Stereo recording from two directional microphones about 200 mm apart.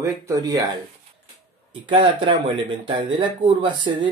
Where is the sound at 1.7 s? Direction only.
25° right (ahead or behind).